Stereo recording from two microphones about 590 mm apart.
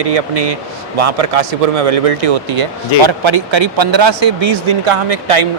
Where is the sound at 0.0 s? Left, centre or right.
Right.